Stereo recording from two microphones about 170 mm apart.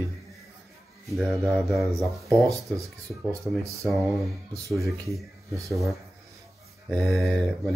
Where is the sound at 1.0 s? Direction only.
Centre (ahead or behind).